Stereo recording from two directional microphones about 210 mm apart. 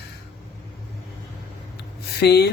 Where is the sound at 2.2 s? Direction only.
50° left (ahead or behind).